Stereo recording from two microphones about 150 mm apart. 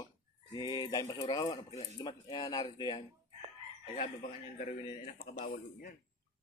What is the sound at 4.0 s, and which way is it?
Speech, 55° left (ahead or behind).